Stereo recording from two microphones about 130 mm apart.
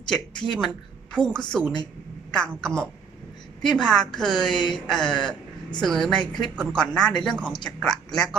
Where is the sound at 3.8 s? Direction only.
5° left (ahead or behind).